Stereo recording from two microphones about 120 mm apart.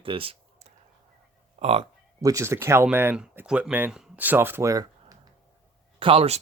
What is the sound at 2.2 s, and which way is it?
Speech, 25° right (ahead or behind).